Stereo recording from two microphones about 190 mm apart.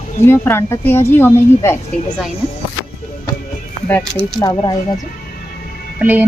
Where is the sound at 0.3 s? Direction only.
10° left (ahead or behind).